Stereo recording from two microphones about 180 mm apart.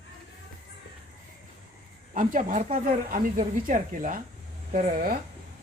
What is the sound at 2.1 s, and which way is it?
Speech, 45° right (ahead or behind).